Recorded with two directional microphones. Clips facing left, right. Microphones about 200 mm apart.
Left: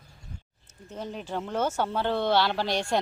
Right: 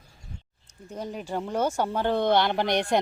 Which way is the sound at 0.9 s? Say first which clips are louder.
Right 2 dB; 10° right (ahead or behind).